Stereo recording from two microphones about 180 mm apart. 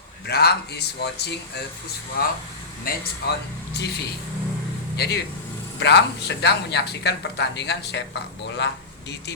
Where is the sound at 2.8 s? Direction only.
65° left (ahead or behind).